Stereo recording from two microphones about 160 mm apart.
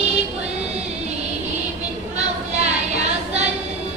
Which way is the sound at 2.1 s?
45° right (ahead or behind).